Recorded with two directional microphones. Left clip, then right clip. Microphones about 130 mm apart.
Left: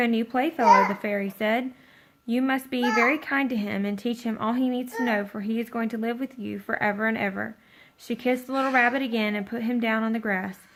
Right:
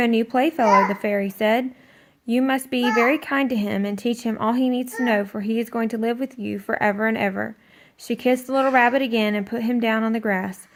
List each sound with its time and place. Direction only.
0.0 s speech: 40° right (ahead or behind)